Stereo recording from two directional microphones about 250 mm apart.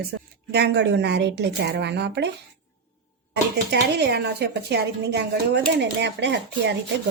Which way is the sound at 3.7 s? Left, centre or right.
Right.